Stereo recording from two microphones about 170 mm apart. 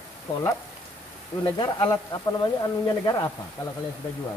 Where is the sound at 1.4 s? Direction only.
30° left (ahead or behind).